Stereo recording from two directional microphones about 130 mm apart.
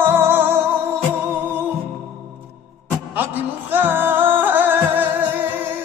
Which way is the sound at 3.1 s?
15° right (ahead or behind).